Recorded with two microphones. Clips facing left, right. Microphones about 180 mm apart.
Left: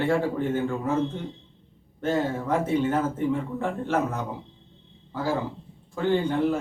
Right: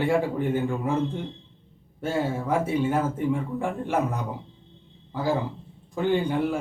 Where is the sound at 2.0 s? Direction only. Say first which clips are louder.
Left 1 dB; 10° right (ahead or behind).